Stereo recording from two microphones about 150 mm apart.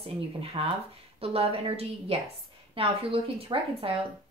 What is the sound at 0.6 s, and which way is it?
Speech, 45° right (ahead or behind).